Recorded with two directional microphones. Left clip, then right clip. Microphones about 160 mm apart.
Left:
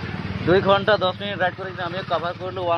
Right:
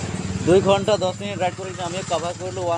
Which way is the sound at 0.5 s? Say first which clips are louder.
Right 1 dB; 20° right (ahead or behind).